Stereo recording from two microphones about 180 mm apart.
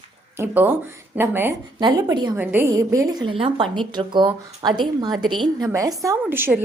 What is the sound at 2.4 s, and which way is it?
A woman's voice, 10° right (ahead or behind).